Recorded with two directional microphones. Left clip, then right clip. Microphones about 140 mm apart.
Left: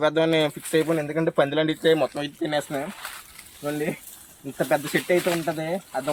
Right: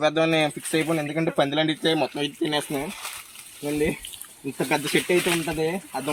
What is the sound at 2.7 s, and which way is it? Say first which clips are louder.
Speech: even; 5° right (ahead or behind).